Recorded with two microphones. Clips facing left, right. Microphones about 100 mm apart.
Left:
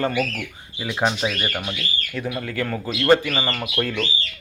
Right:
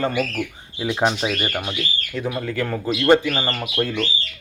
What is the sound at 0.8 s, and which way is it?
Speech, 5° right (ahead or behind).